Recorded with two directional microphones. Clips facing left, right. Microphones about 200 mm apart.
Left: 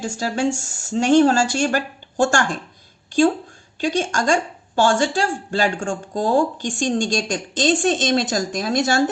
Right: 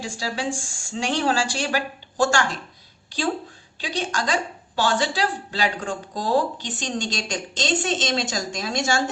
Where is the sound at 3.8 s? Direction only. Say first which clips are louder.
Left 6 dB; 45° left (ahead or behind).